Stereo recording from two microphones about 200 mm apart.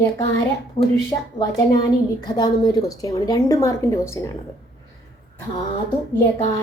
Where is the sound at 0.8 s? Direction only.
35° left (ahead or behind).